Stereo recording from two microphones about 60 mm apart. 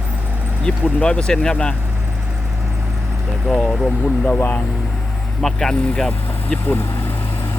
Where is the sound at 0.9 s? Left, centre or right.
Centre.